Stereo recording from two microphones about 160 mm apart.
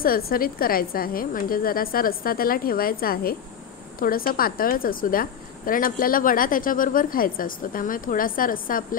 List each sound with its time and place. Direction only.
0.0 s a woman's voice: 65° left (ahead or behind)